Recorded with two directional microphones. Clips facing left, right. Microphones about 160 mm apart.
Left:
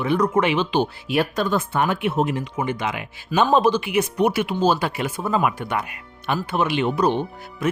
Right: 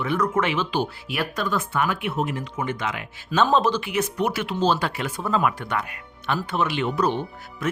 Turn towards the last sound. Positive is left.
turn(degrees=10)  # may be behind; listen again after turning